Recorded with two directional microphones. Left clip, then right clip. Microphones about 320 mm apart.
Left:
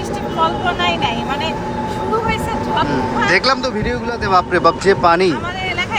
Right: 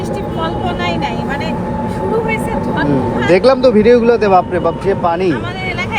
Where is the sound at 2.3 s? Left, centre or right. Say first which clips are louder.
Right 1 dB; centre.